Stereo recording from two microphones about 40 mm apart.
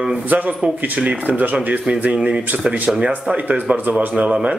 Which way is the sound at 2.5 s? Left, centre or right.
Centre.